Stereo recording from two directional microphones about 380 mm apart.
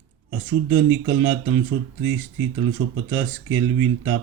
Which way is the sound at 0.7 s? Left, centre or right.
Right.